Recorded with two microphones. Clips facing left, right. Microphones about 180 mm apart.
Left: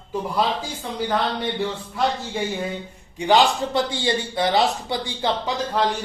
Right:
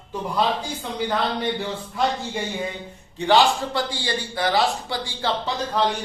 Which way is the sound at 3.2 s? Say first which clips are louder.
Even; 15° left (ahead or behind).